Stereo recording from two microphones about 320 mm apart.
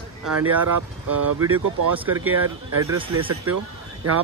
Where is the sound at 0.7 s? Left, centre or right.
Right.